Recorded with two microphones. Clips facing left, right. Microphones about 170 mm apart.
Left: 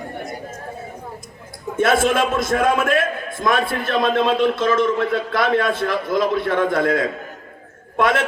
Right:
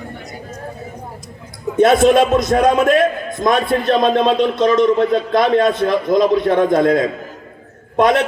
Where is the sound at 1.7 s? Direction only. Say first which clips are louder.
Right 6 dB; 20° right (ahead or behind).